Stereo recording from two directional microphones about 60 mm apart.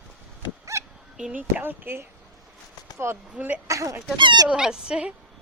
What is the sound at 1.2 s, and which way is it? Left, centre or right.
Speech, right.